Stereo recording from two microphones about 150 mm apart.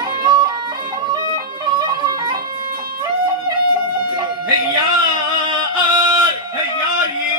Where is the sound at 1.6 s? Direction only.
30° right (ahead or behind).